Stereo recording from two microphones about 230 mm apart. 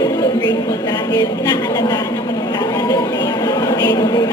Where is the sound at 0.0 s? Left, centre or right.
Centre.